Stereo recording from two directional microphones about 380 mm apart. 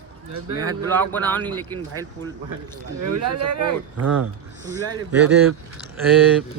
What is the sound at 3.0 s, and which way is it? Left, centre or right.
Speech, right.